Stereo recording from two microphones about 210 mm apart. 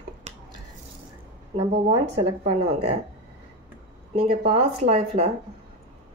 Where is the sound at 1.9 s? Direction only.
25° right (ahead or behind).